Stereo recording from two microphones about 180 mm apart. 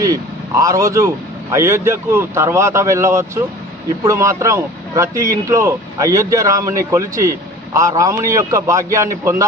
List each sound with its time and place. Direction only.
0.0 s a man's voice: 20° right (ahead or behind)